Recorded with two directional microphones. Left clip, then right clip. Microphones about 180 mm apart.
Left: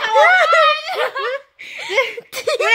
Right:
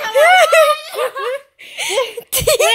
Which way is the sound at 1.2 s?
15° right (ahead or behind).